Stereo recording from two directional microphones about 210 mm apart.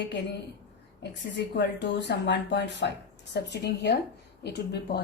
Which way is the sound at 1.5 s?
55° left (ahead or behind).